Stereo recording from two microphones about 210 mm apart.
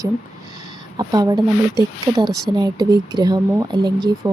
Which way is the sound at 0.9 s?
20° right (ahead or behind).